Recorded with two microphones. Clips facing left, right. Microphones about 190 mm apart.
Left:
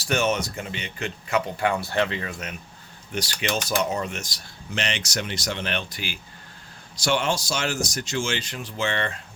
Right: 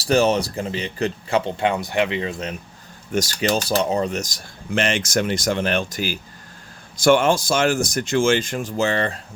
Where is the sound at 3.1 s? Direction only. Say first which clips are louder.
Right 7 dB; 45° right (ahead or behind).